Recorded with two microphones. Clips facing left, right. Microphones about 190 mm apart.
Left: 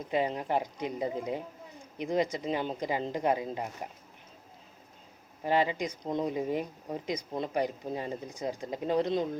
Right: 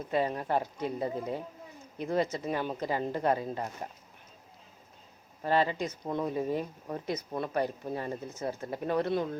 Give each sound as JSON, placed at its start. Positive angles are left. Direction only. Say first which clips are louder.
{"t": 0.1, "sound": "speech", "louder": "even", "side_deg": 15}
{"t": 5.4, "sound": "speech", "louder": "even", "side_deg": 15}